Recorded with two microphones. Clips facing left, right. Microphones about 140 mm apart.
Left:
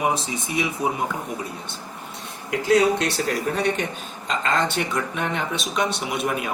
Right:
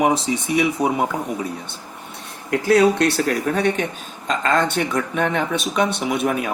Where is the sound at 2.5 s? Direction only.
60° right (ahead or behind).